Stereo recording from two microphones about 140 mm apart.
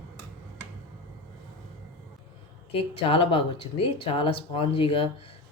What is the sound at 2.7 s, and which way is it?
Speech, 45° left (ahead or behind).